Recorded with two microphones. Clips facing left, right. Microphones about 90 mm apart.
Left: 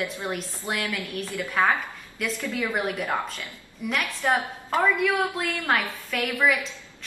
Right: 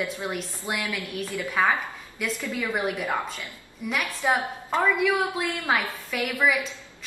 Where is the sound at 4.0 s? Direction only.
15° right (ahead or behind).